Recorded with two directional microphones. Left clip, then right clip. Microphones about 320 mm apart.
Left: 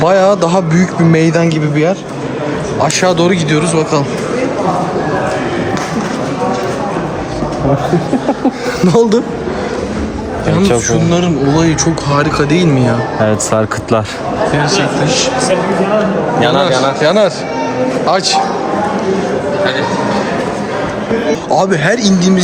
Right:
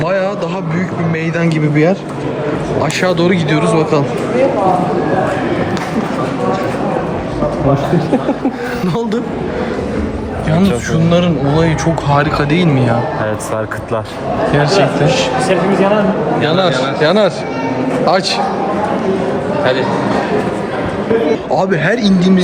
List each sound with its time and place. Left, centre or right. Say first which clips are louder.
0.0 s speech: left 6 dB; centre
8.9 s speech: left 11 dB; centre
11.1 s speech: right 2 dB; centre
13.2 s speech: left 5 dB; left
14.5 s speech: right 2 dB; centre
15.0 s a man's voice: even; right
16.6 s speech: left 2 dB; centre
21.5 s speech: left 5 dB; centre